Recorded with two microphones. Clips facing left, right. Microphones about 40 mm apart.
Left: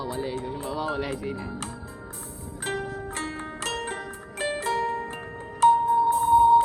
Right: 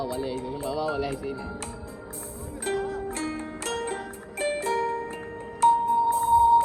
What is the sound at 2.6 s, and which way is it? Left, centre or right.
Music, left.